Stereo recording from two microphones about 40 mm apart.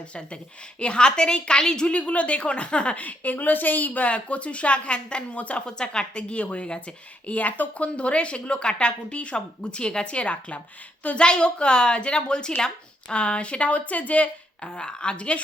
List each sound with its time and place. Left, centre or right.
0.0 s speech: left
1.9 s speech: left
3.0 s speech: left
5.6 s speech: centre; by 14.3 s left
14.6 s speech: left